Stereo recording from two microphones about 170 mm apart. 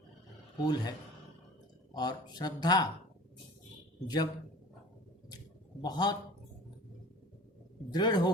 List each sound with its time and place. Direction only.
0.6 s speech: 25° left (ahead or behind)
4.0 s speech: 25° left (ahead or behind)
5.8 s speech: 25° left (ahead or behind)
7.9 s speech: 25° left (ahead or behind)